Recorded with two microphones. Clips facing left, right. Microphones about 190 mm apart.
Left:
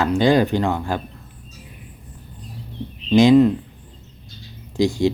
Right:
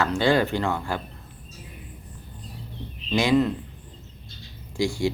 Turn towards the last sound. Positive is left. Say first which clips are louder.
# left 6 dB
turn(degrees=20)  # may be behind; listen again after turning